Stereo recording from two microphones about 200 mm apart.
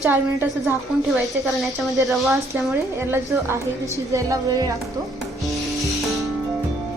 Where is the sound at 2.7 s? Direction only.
10° right (ahead or behind).